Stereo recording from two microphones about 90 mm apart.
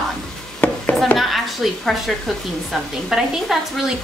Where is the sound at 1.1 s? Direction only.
Centre (ahead or behind).